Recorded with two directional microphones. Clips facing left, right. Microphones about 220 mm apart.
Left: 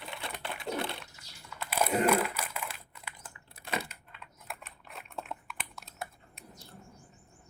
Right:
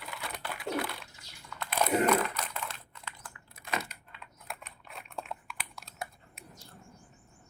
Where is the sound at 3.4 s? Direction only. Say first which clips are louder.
Even; 35° left (ahead or behind).